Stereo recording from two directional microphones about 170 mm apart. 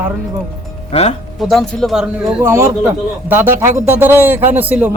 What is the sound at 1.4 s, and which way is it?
Speech, centre (ahead or behind).